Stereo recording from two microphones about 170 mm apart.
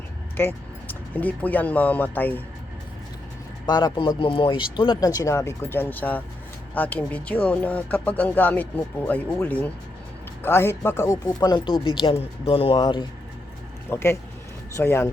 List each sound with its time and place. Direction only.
0.3 s speech: 10° left (ahead or behind)
3.7 s speech: 25° left (ahead or behind)
13.9 s speech: 15° left (ahead or behind)